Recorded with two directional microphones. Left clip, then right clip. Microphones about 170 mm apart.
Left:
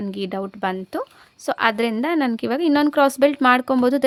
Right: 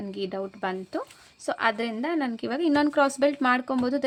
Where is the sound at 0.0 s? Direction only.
40° left (ahead or behind).